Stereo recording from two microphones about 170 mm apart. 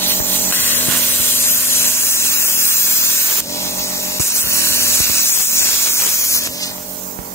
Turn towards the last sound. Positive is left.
turn(degrees=20)  # may be behind; listen again after turning